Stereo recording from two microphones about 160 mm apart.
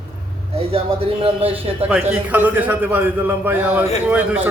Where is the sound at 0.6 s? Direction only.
35° right (ahead or behind).